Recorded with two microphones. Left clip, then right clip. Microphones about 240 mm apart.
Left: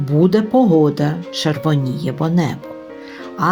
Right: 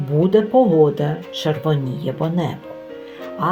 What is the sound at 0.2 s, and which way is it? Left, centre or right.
Speech, left.